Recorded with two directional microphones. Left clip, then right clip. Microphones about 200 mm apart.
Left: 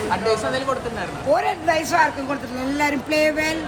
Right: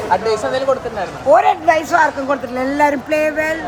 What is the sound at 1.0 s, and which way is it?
Speech, 25° right (ahead or behind).